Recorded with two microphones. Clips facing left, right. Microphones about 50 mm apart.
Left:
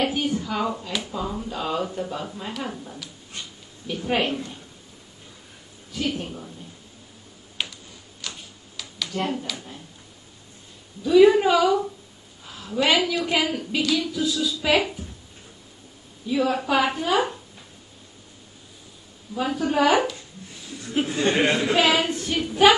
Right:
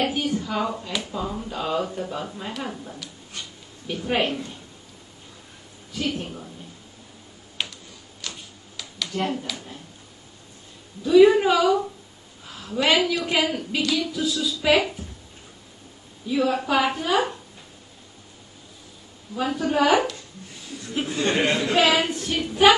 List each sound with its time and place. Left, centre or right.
0.0 s a woman's voice: centre
7.6 s computer keyboard: centre
8.2 s tick-tock: centre
8.7 s a sound: centre
9.4 s speech: centre
11.1 s a woman's voice: centre
16.3 s a woman's voice: centre
19.3 s a woman's voice: centre
20.9 s a woman's voice: left
22.0 s a woman's voice: centre